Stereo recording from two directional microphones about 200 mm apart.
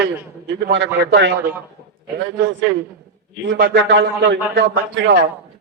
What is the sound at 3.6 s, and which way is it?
A man's voice, 60° right (ahead or behind).